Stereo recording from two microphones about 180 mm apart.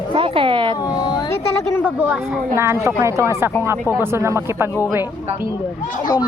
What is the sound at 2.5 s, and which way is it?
A woman's voice, 15° right (ahead or behind).